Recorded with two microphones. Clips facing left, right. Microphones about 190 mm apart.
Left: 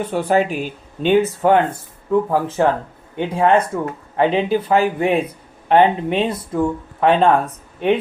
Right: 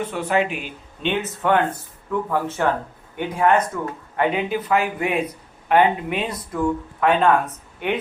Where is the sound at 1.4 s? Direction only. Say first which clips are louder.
Left 5 dB; 25° left (ahead or behind).